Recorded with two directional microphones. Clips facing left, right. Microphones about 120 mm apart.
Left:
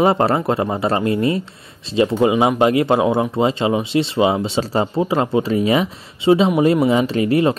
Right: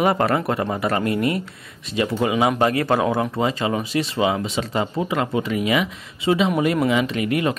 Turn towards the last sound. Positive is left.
turn(degrees=30)  # may be behind; listen again after turning